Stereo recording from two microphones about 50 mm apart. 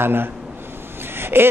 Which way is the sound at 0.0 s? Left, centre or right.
Right.